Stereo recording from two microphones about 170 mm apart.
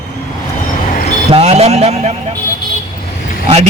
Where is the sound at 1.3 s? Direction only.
35° right (ahead or behind).